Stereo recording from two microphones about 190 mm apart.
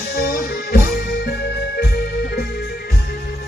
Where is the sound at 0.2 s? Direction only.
55° left (ahead or behind).